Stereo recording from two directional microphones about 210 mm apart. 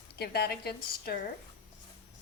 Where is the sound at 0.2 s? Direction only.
50° left (ahead or behind).